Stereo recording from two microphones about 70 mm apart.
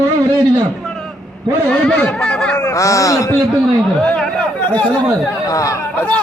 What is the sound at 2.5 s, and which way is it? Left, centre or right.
Speech, left.